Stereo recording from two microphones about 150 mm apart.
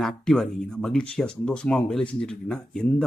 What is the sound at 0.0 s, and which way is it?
Speech, centre (ahead or behind).